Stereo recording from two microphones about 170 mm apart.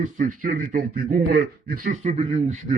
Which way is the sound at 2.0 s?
40° right (ahead or behind).